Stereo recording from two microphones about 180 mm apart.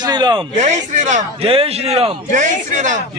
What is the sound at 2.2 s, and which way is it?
Speech, 45° right (ahead or behind).